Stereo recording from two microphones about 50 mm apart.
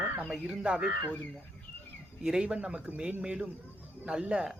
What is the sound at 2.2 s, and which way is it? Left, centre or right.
Speech, centre.